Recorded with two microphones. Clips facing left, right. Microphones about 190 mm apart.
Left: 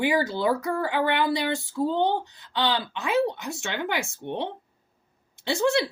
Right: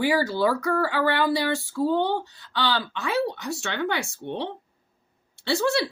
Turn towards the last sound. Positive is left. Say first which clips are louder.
# even
turn(degrees=20)  # may be behind; listen again after turning